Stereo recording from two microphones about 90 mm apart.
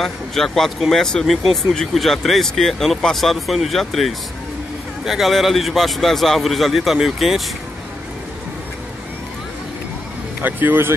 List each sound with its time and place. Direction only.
0.0 s speech: 5° left (ahead or behind)
10.4 s speech: 20° right (ahead or behind)